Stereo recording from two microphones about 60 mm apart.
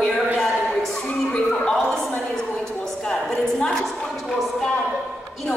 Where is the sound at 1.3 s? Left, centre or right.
Centre.